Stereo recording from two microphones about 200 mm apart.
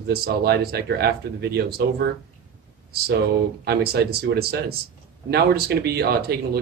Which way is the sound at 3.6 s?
50° right (ahead or behind).